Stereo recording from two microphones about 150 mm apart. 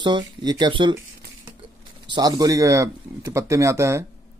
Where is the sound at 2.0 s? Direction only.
25° right (ahead or behind).